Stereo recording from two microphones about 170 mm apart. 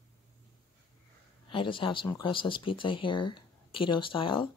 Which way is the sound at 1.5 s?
30° left (ahead or behind).